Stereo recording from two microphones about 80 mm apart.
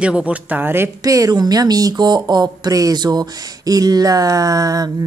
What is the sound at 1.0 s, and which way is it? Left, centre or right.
Speech, right.